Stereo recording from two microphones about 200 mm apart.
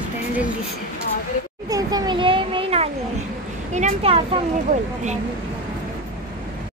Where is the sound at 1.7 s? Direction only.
20° right (ahead or behind).